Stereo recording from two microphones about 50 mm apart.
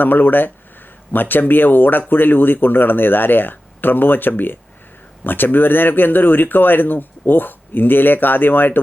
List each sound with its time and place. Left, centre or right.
0.0 s speech: left